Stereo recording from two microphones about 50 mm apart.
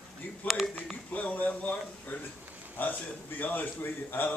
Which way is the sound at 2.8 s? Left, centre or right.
Left.